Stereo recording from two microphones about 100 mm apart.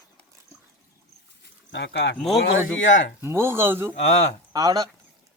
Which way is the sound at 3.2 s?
25° right (ahead or behind).